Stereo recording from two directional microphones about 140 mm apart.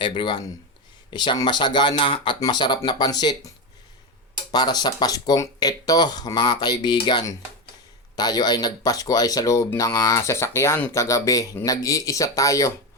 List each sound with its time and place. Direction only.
0.0 s speech: 35° left (ahead or behind)
4.5 s speech: 30° left (ahead or behind)